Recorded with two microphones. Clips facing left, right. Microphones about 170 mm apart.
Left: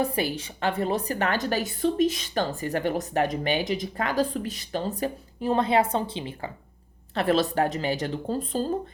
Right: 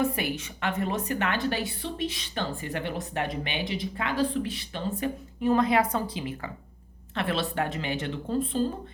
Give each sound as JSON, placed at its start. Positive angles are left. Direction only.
{"t": 0.0, "sound": "a woman's voice", "side_deg": 30}
{"t": 7.1, "sound": "a woman's voice", "side_deg": 40}